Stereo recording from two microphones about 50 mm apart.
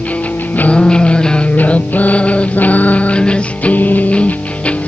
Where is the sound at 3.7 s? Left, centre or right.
Left.